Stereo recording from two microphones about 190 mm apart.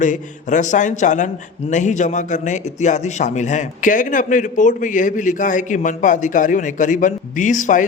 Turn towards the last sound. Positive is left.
turn(degrees=40)  # may be behind; listen again after turning